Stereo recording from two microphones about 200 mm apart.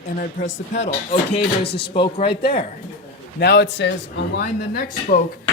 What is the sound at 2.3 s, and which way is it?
Speech, 55° left (ahead or behind).